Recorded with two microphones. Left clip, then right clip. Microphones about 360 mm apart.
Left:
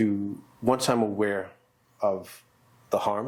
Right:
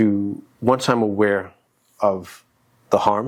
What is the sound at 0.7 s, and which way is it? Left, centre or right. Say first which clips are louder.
Speech: right 6 dB; right.